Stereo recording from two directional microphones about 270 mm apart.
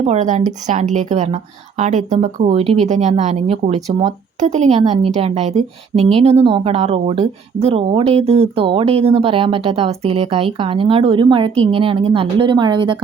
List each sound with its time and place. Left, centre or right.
0.0 s speech: right